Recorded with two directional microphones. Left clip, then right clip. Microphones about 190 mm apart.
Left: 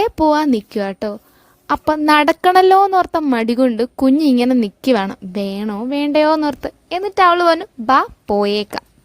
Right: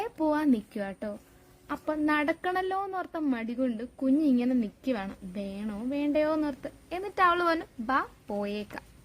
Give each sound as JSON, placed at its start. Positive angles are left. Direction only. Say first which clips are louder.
{"t": 0.0, "sound": "a woman's voice", "louder": "left 14 dB", "side_deg": 40}